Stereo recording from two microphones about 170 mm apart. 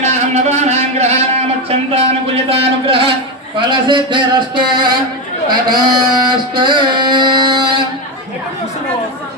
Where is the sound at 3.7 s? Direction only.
30° right (ahead or behind).